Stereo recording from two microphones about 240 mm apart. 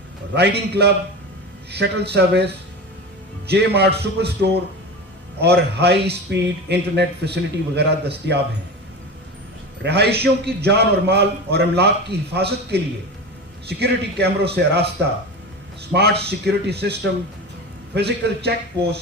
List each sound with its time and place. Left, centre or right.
0.3 s a man's voice: right
9.8 s a man's voice: right
15.9 s a man's voice: right